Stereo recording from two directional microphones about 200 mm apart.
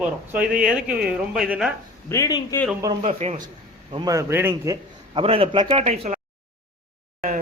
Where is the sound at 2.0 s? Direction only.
15° left (ahead or behind).